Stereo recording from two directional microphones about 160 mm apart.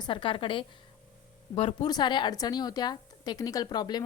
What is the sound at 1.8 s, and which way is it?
A woman's voice, 25° left (ahead or behind).